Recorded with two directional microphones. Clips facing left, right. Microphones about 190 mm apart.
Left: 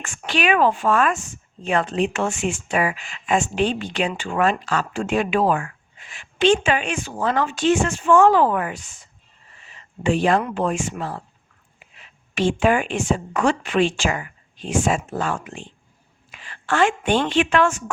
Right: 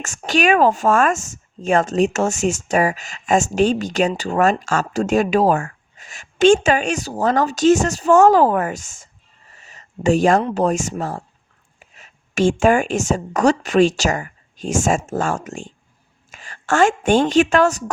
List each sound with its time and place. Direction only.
0.0 s speech: 40° right (ahead or behind)
9.6 s a sound: 40° right (ahead or behind)
10.4 s a woman's voice: 40° right (ahead or behind)